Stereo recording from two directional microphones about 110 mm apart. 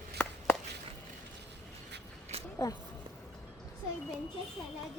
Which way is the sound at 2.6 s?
30° left (ahead or behind).